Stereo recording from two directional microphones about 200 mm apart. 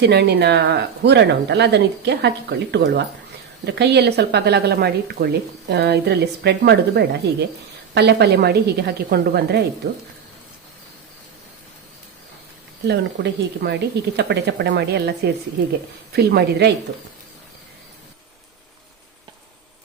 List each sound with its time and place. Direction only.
0.0 s speech: 55° right (ahead or behind)
12.9 s speech: 55° right (ahead or behind)